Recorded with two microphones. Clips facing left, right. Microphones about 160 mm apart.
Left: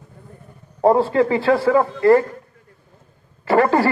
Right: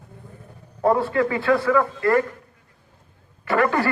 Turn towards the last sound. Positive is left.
turn(degrees=30)  # may be behind; listen again after turning